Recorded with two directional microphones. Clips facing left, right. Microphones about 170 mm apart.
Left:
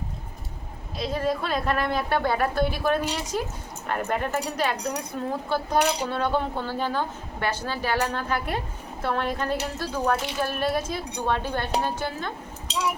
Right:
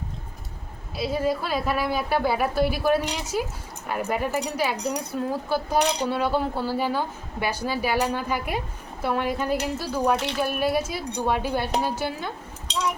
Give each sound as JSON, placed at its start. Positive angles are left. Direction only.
{"t": 0.9, "sound": "a woman's voice", "side_deg": -5}
{"t": 12.6, "sound": "dishes", "side_deg": 5}